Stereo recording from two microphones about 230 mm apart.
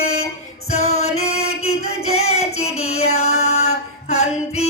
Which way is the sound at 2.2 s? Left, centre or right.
Left.